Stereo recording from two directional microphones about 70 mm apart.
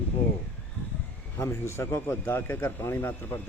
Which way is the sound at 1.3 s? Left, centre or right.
Left.